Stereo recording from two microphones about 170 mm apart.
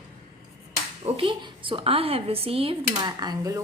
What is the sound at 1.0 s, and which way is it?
Speech, 35° right (ahead or behind).